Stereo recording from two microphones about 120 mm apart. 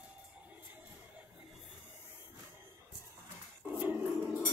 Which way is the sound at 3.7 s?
15° right (ahead or behind).